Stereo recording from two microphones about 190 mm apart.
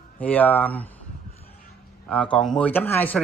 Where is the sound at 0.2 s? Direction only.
10° left (ahead or behind).